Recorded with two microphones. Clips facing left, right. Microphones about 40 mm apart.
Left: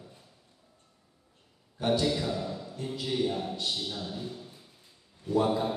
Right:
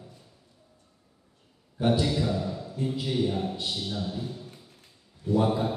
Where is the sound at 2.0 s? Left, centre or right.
Centre.